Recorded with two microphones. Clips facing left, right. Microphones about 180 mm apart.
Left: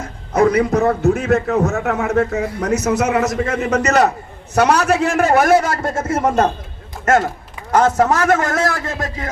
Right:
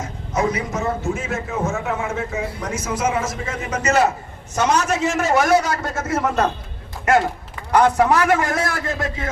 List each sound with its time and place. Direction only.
0.0 s a man's voice: 60° left (ahead or behind)
5.9 s a man's voice: 30° left (ahead or behind)
7.0 s a man's voice: 45° left (ahead or behind)